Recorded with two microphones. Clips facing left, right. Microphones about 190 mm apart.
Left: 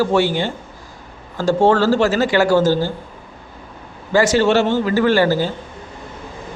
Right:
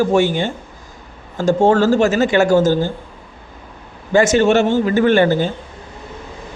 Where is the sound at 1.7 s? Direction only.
20° right (ahead or behind).